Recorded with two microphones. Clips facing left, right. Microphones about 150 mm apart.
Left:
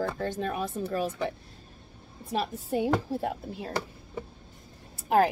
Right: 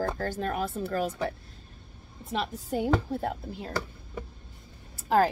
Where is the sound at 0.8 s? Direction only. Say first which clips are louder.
Even; 20° left (ahead or behind).